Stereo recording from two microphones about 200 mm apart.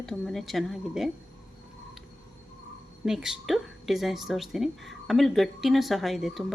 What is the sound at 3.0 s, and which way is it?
Speech, centre (ahead or behind).